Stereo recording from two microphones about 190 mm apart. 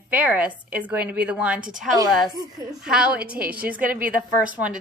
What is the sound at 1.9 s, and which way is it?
Speech, 20° right (ahead or behind).